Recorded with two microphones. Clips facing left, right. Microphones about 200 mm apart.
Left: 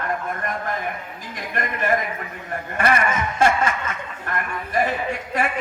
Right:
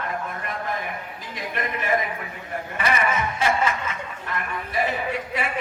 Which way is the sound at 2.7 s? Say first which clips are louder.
Left 5 dB; 55° left (ahead or behind).